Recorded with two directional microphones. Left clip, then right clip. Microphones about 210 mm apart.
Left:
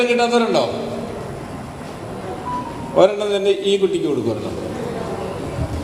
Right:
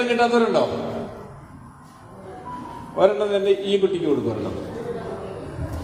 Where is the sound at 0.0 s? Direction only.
55° left (ahead or behind).